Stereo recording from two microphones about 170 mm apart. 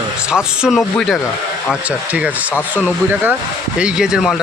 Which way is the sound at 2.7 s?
10° right (ahead or behind).